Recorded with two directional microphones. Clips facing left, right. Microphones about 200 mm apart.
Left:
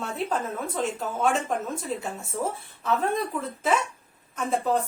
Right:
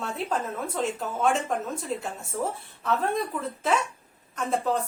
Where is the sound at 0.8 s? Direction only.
Centre (ahead or behind).